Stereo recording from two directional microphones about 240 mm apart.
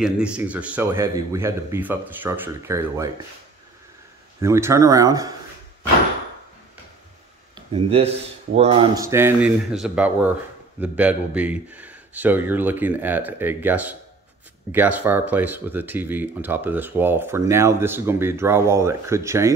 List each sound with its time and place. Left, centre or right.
0.0 s speech: centre
4.4 s speech: centre
7.5 s speech: right